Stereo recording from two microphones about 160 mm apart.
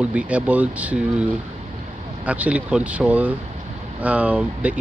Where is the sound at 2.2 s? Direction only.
10° right (ahead or behind).